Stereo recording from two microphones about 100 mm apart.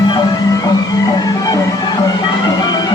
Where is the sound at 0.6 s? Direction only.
40° left (ahead or behind).